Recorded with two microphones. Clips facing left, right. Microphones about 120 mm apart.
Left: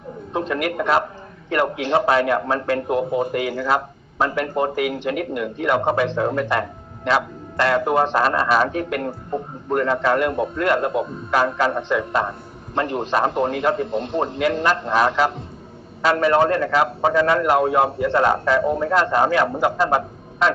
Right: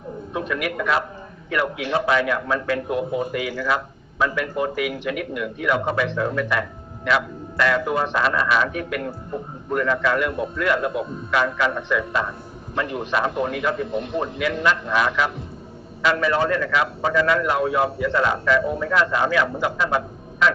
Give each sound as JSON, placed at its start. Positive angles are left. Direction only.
{"t": 0.3, "sound": "a man's voice", "side_deg": 35}